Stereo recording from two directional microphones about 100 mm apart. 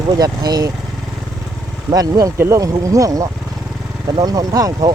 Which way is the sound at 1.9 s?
40° right (ahead or behind).